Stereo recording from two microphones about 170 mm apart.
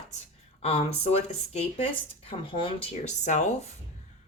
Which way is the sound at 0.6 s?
35° left (ahead or behind).